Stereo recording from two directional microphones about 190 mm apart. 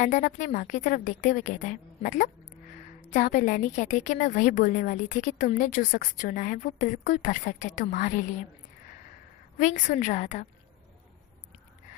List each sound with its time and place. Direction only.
0.0 s a woman's voice: 45° left (ahead or behind)
9.6 s a woman's voice: 40° left (ahead or behind)